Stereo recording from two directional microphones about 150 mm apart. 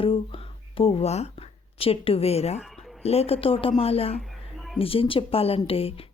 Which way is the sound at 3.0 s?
45° left (ahead or behind).